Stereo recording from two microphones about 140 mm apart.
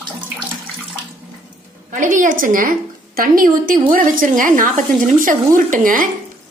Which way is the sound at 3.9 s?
75° right (ahead or behind).